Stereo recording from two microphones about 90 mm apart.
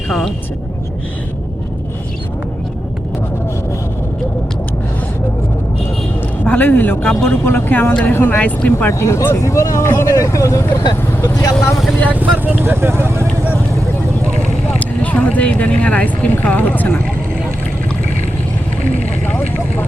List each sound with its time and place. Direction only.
0.1 s speech: 5° left (ahead or behind)
6.4 s speech: 15° left (ahead or behind)
8.9 s speech: 30° left (ahead or behind)
12.1 s speech: 20° right (ahead or behind)
14.8 s speech: 15° left (ahead or behind)
19.2 s speech: 15° left (ahead or behind)